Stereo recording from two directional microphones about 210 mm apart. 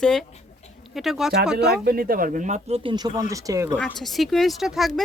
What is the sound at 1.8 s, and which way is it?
Speech, 45° right (ahead or behind).